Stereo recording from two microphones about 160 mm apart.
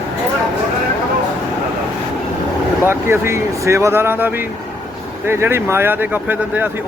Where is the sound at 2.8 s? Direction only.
15° right (ahead or behind).